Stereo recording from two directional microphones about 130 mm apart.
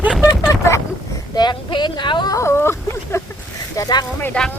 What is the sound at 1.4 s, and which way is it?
Speech, 35° left (ahead or behind).